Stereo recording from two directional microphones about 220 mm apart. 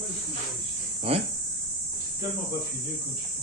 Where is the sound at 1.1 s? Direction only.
25° right (ahead or behind).